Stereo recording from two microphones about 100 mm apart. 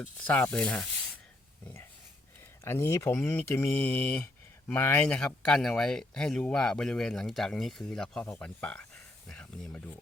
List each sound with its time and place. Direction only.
0.0 s speech: 15° left (ahead or behind)
2.6 s speech: 25° left (ahead or behind); by 9.8 s 10° left (ahead or behind)